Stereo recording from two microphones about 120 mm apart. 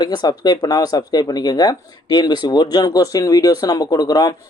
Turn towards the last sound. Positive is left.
turn(degrees=30)  # may be behind; listen again after turning